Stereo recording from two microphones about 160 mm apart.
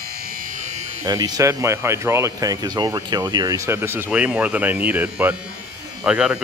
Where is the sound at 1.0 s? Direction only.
25° right (ahead or behind).